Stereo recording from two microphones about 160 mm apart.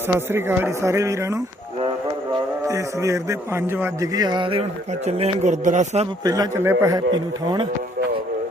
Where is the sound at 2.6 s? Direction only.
20° right (ahead or behind); by 6.1 s 45° right (ahead or behind).